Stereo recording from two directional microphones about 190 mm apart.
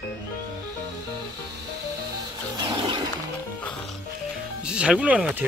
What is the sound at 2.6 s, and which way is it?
Wild animals, 25° right (ahead or behind).